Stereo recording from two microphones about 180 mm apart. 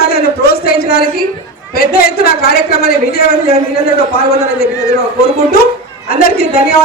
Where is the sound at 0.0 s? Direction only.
60° left (ahead or behind).